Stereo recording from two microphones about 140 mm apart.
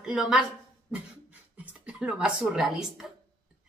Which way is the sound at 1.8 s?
10° right (ahead or behind).